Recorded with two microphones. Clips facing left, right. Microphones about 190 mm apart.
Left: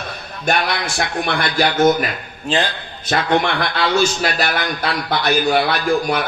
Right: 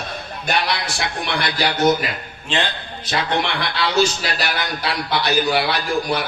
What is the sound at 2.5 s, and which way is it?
Speech, 35° left (ahead or behind).